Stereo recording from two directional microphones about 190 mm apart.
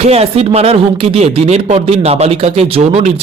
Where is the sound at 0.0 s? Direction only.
35° right (ahead or behind).